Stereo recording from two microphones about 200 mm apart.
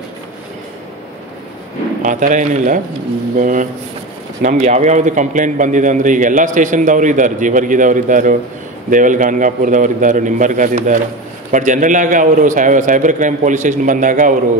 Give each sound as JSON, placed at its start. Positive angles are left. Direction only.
{"t": 2.0, "sound": "a man's voice", "side_deg": -40}